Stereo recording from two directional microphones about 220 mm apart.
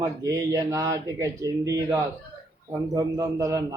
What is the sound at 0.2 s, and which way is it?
Speech, 15° right (ahead or behind).